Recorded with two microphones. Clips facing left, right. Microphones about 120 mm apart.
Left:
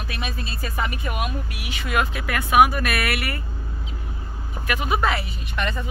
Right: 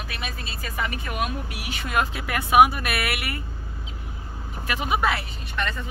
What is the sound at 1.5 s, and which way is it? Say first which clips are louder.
Speech: left 1 dB; 40° right (ahead or behind).